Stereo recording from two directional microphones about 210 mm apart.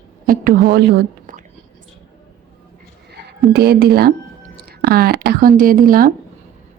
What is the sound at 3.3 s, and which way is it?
Speech, 50° right (ahead or behind).